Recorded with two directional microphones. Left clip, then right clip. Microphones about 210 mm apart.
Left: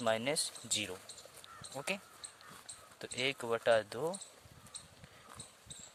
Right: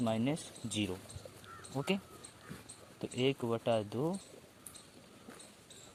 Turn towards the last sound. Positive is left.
turn(degrees=25)  # may be behind; listen again after turning